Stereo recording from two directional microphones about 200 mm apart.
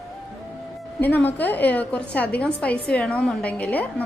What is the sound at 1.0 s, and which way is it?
A woman's voice, 10° left (ahead or behind).